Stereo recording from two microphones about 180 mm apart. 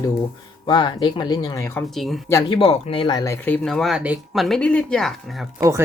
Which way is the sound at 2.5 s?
30° left (ahead or behind).